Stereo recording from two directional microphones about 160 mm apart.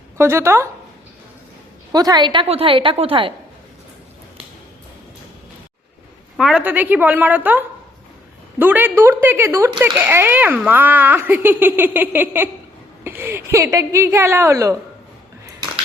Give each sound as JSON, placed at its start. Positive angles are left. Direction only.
{"t": 0.2, "sound": "speech", "side_deg": -15}
{"t": 1.9, "sound": "a woman's voice", "side_deg": -25}
{"t": 6.3, "sound": "speech", "side_deg": -5}